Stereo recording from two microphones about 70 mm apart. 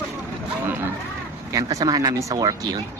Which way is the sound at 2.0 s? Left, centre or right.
Right.